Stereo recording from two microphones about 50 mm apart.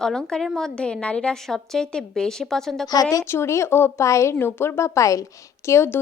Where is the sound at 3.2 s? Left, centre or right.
Left.